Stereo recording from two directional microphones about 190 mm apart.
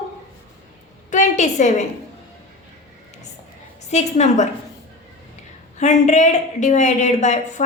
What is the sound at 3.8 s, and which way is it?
Speech, 35° left (ahead or behind).